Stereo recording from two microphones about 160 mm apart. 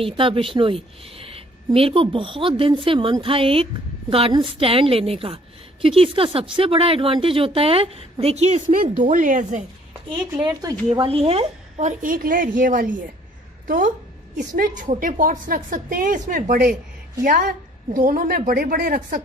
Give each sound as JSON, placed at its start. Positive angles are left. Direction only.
{"t": 0.0, "sound": "a woman's voice", "side_deg": -35}
{"t": 10.4, "sound": "speech", "side_deg": -25}
{"t": 10.9, "sound": "a woman's voice", "side_deg": -35}
{"t": 12.0, "sound": "a woman's voice", "side_deg": -60}